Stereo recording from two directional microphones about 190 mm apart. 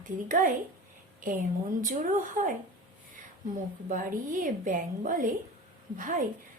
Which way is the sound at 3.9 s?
45° right (ahead or behind).